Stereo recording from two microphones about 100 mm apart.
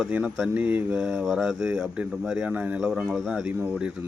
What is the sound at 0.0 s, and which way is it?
A man's voice, 15° right (ahead or behind).